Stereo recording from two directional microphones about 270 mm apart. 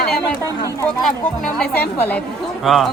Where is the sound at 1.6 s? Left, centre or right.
Centre.